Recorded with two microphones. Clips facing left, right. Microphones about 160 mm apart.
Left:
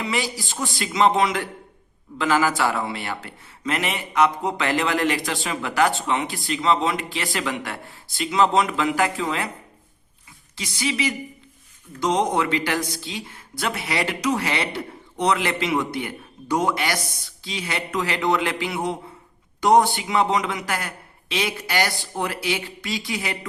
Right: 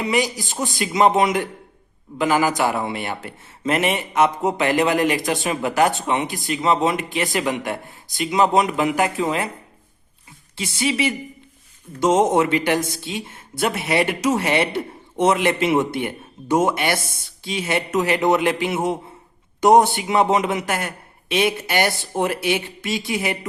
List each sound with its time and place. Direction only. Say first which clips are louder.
0.0 s a man's voice: right 5 dB; 20° right (ahead or behind)
10.6 s a man's voice: right 4 dB; 25° right (ahead or behind)